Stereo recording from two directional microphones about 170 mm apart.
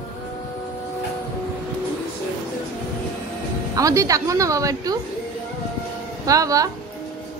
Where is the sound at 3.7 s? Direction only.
20° right (ahead or behind).